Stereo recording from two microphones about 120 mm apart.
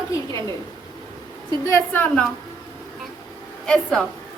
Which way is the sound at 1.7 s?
15° left (ahead or behind).